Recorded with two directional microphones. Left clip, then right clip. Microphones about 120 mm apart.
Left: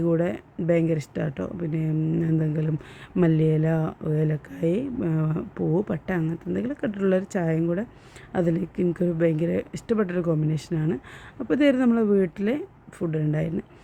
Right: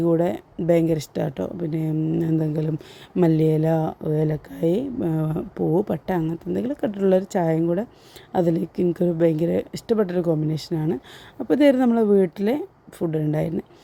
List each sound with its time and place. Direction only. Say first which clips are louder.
0.0 s speech: right 4 dB; 45° right (ahead or behind)